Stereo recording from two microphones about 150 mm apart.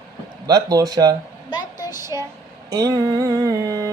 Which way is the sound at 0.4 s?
25° right (ahead or behind).